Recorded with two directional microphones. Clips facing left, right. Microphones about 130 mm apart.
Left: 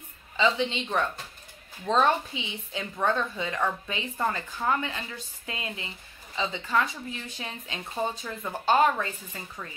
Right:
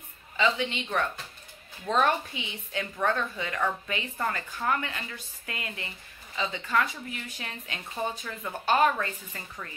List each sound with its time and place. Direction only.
0.4 s a woman's voice: 25° left (ahead or behind)
2.0 s a woman's voice: 20° left (ahead or behind)
3.0 s speech: 5° left (ahead or behind)
3.3 s a woman's voice: 20° left (ahead or behind)